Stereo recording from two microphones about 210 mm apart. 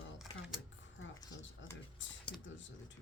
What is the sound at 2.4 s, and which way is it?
Speech, 60° left (ahead or behind).